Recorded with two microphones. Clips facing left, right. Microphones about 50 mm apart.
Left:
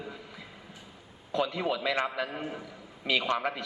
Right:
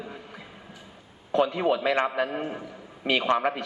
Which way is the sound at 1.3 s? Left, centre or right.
Right.